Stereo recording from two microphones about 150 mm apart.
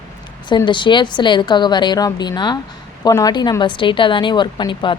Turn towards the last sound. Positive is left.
turn(degrees=30)  # may be behind; listen again after turning